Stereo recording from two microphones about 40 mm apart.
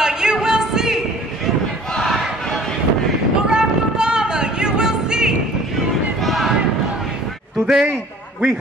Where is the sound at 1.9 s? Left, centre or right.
Centre.